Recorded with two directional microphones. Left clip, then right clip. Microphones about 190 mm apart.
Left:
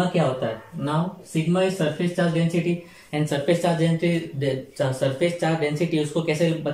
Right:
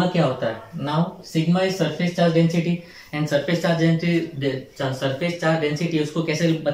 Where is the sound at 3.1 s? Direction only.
15° left (ahead or behind).